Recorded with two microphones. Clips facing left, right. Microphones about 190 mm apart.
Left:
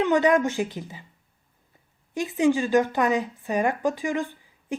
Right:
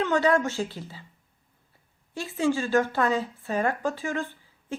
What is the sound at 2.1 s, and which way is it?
A woman's voice, 15° left (ahead or behind).